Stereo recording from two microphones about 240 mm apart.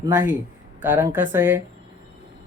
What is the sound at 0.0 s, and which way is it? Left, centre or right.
A man's voice, centre.